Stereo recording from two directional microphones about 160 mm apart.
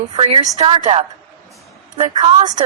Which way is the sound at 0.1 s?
35° right (ahead or behind).